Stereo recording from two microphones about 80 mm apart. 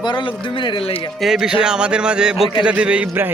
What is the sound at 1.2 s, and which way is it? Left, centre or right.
A man's voice, centre.